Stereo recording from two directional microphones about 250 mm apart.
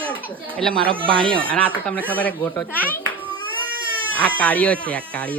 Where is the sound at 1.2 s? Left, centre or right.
Centre.